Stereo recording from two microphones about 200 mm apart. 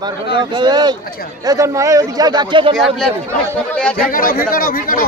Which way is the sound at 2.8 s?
5° left (ahead or behind).